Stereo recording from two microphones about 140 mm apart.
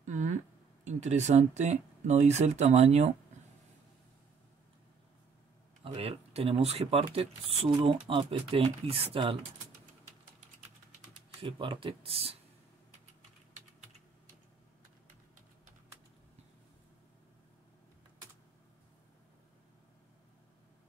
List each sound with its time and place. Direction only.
0.0 s a sound: 60° right (ahead or behind)
0.8 s speech: 55° right (ahead or behind)
5.9 s speech: 40° right (ahead or behind)
11.3 s speech: 40° right (ahead or behind)